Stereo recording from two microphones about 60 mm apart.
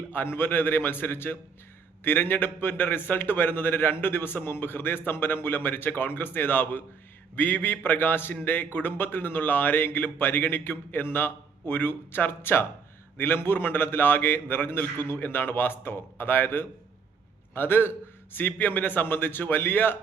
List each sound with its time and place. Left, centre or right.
0.1 s a man's voice: left